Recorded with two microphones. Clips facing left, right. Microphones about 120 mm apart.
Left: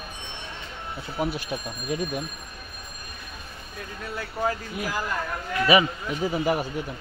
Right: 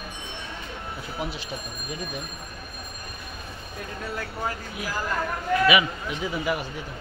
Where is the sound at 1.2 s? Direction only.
50° left (ahead or behind).